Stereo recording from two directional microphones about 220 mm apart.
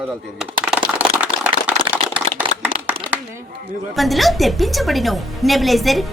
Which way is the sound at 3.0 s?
20° right (ahead or behind).